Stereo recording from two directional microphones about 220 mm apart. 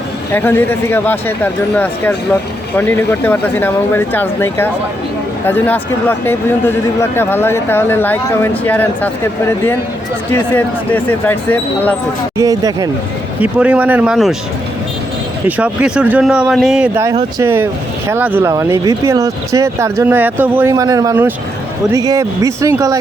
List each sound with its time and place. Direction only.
0.3 s speech: 10° left (ahead or behind)
10.3 s speech: 10° left (ahead or behind)
12.4 s speech: 15° right (ahead or behind)
15.4 s speech: 5° right (ahead or behind)